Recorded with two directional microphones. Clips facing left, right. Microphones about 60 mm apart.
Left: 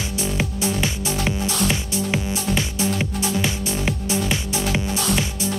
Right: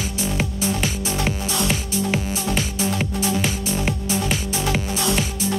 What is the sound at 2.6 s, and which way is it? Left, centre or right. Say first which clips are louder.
Music: even; right.